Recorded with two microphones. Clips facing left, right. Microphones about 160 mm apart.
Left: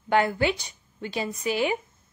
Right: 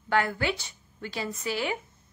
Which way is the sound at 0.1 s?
20° left (ahead or behind).